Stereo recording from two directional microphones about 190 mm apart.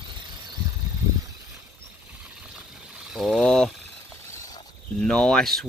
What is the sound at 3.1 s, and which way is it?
Speech, 5° right (ahead or behind).